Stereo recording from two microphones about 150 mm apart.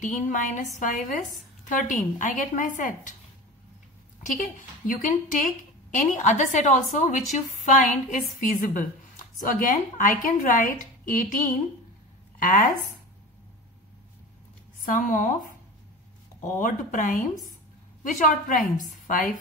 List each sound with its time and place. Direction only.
0.0 s a woman's voice: 60° left (ahead or behind)
4.2 s a woman's voice: 60° left (ahead or behind)
14.9 s a woman's voice: 60° left (ahead or behind)